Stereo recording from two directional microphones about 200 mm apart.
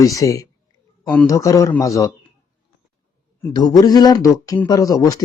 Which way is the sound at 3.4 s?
20° left (ahead or behind).